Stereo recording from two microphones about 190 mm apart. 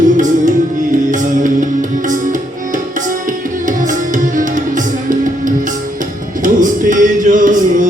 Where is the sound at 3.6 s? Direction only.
45° right (ahead or behind).